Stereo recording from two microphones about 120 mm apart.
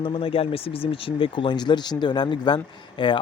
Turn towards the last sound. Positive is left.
turn(degrees=40)  # may be behind; listen again after turning